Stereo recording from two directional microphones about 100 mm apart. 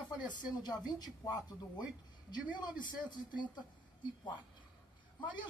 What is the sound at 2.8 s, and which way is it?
Speech, 50° left (ahead or behind).